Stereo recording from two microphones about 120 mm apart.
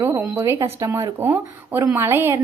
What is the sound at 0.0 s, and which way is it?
A woman's voice, 20° right (ahead or behind).